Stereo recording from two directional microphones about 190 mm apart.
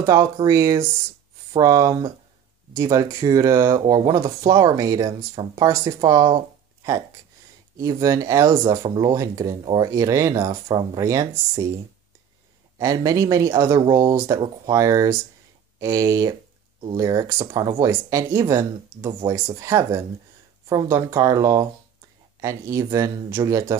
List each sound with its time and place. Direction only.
0.0 s speech: 20° right (ahead or behind)
7.7 s speech: 15° right (ahead or behind)
12.7 s speech: 20° right (ahead or behind)